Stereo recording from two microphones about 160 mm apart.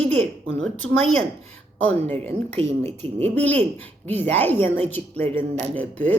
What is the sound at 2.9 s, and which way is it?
Speech, 40° right (ahead or behind).